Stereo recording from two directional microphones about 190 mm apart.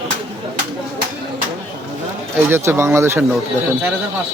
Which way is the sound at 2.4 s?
10° right (ahead or behind).